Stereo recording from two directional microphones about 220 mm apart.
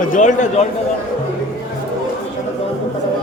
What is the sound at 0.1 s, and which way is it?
Speech, 35° left (ahead or behind).